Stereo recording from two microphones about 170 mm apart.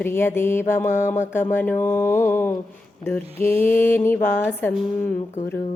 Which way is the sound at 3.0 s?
10° left (ahead or behind).